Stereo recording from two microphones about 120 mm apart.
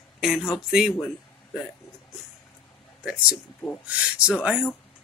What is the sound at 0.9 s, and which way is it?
Speech, 20° left (ahead or behind).